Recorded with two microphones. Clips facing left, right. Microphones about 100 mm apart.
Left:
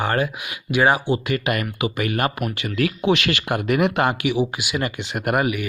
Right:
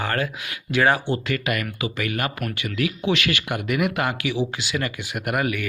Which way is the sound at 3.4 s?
35° left (ahead or behind).